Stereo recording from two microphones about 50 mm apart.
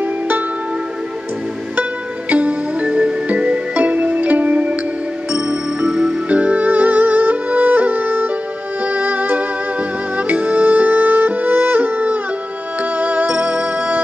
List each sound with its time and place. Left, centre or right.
1.8 s music: right
5.3 s music: centre
6.2 s music: right